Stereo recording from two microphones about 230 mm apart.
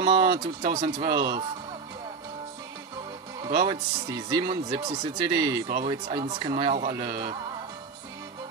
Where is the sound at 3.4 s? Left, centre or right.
Right.